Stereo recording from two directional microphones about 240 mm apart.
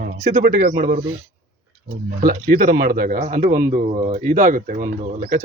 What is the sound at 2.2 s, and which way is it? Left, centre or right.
A man's voice, right.